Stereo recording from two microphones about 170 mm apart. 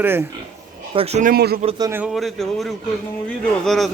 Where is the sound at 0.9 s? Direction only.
35° right (ahead or behind).